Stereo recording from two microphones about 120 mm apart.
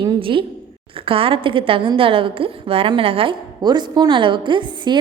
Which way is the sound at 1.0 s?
50° right (ahead or behind).